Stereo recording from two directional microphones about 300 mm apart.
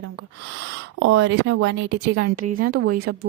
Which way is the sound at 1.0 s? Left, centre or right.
Right.